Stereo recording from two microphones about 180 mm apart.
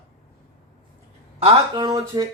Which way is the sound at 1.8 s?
20° right (ahead or behind).